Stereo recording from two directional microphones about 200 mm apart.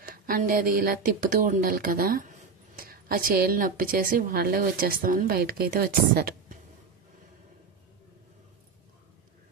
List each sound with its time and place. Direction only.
0.1 s a woman's voice: 45° right (ahead or behind)